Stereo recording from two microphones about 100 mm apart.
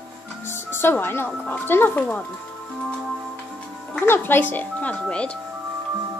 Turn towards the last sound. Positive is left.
turn(degrees=10)  # may be behind; listen again after turning